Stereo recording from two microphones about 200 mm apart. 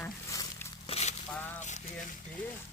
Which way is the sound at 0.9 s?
35° left (ahead or behind).